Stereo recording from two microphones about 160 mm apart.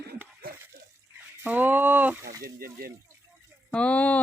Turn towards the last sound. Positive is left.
turn(degrees=10)  # may be behind; listen again after turning